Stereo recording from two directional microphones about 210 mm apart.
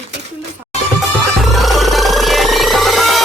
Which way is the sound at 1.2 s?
Centre (ahead or behind).